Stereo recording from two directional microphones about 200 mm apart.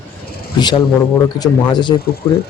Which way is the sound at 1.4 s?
20° left (ahead or behind).